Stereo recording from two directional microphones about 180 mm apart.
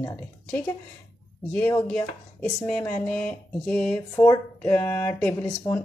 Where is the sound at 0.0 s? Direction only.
15° left (ahead or behind).